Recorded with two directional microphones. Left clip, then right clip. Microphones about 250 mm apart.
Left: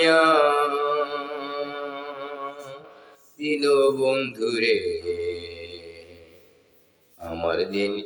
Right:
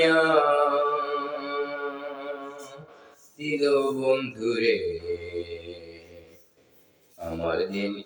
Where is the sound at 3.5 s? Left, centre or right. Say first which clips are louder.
Left 4 dB; left.